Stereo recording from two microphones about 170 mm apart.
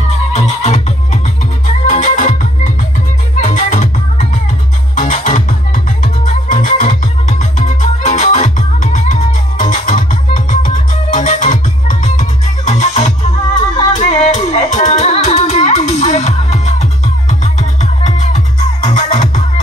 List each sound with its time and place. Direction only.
0.3 s music: 40° left (ahead or behind)